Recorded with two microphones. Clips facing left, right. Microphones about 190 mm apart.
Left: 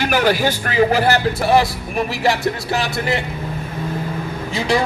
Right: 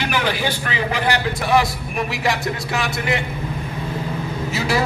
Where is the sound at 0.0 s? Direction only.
45° left (ahead or behind).